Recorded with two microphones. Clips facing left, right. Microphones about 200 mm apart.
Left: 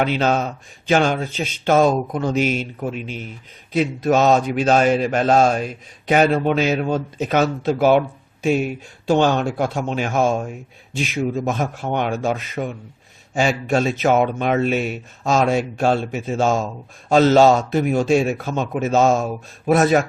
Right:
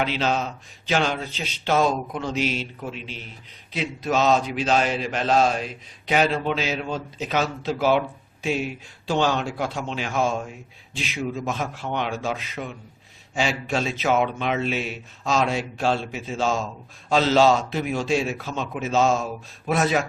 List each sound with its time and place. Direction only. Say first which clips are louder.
0.0 s a man's voice: left 5 dB; 50° left (ahead or behind)